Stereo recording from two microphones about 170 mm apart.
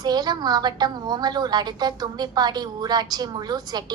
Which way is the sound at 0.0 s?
25° right (ahead or behind).